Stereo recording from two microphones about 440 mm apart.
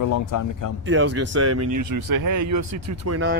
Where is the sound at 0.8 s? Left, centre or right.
Right.